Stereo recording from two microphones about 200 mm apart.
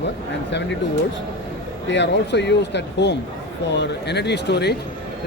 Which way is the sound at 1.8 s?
65° left (ahead or behind).